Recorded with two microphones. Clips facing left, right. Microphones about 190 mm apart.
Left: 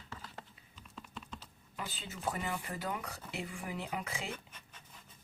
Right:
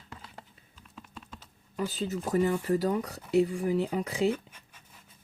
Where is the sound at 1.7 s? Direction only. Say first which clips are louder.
Right 13 dB; 40° right (ahead or behind).